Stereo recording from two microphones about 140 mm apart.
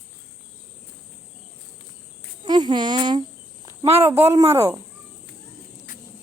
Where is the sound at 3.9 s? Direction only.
45° right (ahead or behind).